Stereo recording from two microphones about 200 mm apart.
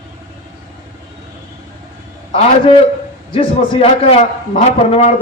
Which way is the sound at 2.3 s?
30° left (ahead or behind).